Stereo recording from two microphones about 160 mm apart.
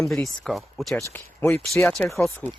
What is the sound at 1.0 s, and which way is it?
Speech, 15° left (ahead or behind).